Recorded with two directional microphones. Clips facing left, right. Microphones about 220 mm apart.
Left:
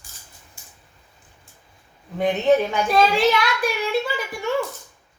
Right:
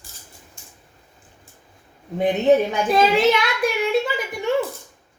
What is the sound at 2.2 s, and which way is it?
A child's voice, 20° right (ahead or behind).